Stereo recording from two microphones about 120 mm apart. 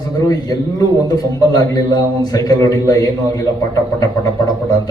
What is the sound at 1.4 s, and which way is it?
A man's voice, 30° left (ahead or behind).